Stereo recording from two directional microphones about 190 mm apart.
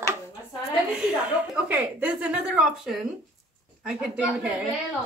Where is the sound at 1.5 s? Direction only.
5° right (ahead or behind).